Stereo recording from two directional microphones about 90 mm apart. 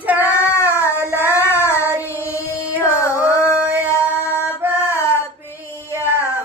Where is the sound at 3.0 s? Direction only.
35° left (ahead or behind).